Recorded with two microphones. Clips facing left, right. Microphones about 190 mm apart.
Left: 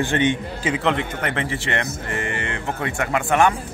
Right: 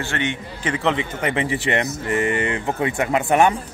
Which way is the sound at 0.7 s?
Centre (ahead or behind).